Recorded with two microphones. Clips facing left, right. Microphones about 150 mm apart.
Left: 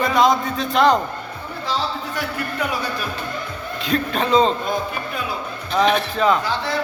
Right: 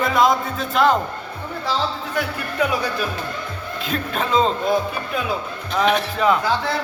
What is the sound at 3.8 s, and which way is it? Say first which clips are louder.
Speech: left 3 dB; 5° right (ahead or behind).